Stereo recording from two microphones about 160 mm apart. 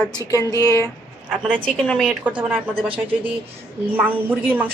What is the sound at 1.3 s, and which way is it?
Speech, 10° right (ahead or behind).